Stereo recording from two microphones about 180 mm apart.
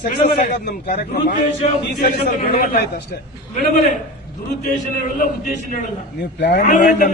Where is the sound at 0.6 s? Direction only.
60° left (ahead or behind).